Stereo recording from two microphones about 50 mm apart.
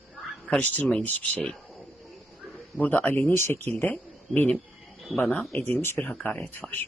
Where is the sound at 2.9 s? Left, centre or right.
Left.